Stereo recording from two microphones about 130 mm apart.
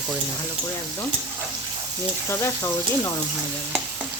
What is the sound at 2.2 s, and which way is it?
Speech, 20° left (ahead or behind).